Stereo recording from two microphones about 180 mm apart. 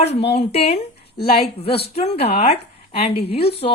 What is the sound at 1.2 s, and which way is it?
Speech, 30° left (ahead or behind).